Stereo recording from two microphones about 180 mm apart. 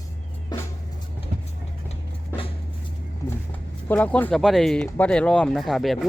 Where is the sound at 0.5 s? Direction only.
20° left (ahead or behind).